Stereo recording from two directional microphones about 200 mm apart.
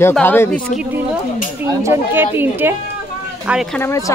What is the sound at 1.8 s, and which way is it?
Speech, 10° right (ahead or behind).